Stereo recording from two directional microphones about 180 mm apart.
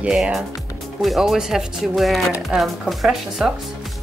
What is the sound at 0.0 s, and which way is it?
Speech, 5° right (ahead or behind).